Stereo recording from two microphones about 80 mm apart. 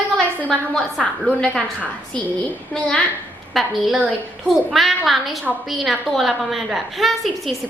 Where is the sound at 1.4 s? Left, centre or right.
Centre.